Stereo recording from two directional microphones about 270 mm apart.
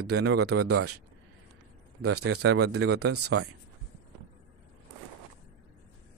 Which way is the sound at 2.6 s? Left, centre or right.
Right.